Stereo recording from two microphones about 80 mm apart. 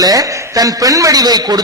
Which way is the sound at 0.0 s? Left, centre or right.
Right.